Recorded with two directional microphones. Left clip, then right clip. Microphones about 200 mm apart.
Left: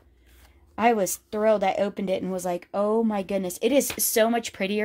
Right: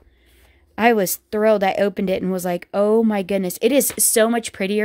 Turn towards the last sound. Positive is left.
turn(degrees=-35)  # may be behind; listen again after turning